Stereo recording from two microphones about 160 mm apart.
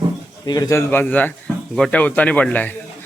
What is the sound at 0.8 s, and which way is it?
A man's voice, 10° left (ahead or behind).